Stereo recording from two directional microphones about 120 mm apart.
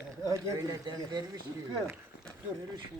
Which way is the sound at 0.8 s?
35° right (ahead or behind).